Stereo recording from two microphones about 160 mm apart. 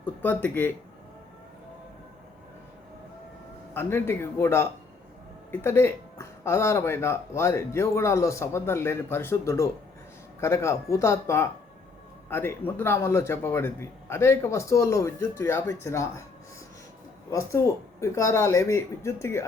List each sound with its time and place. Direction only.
0.0 s speech: 10° left (ahead or behind)
3.8 s speech: 15° left (ahead or behind)
17.6 s speech: 20° left (ahead or behind)